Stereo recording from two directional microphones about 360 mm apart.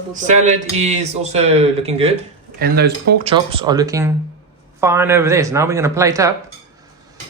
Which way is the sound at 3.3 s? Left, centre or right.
Centre.